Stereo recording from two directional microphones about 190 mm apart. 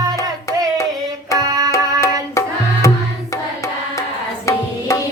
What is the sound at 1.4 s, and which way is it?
Music, 20° right (ahead or behind).